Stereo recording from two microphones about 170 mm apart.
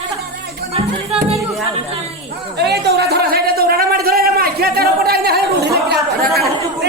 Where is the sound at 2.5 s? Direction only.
75° right (ahead or behind).